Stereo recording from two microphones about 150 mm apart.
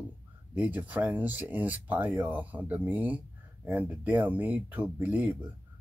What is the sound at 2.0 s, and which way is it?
Speech, 20° right (ahead or behind).